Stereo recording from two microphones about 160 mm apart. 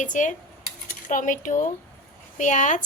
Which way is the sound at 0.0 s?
50° left (ahead or behind).